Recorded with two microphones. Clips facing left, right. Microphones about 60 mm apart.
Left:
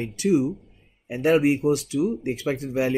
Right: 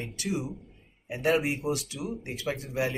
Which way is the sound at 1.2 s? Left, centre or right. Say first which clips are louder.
Left 7 dB; left.